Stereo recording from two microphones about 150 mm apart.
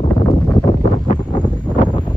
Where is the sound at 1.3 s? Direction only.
30° left (ahead or behind).